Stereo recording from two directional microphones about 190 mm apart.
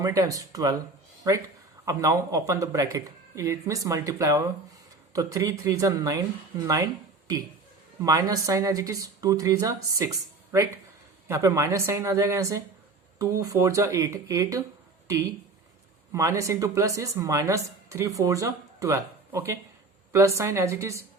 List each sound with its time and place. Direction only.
0.0 s speech: 20° right (ahead or behind)
8.0 s speech: 20° right (ahead or behind)
16.1 s speech: 15° right (ahead or behind)